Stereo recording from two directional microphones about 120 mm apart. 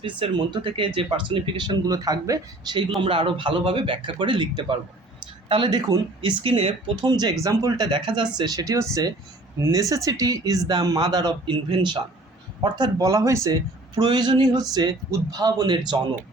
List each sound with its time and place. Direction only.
0.0 s a man's voice: 40° right (ahead or behind)
3.0 s speech: 45° right (ahead or behind)
6.4 s speech: 55° right (ahead or behind)
6.9 s a man's voice: 35° right (ahead or behind)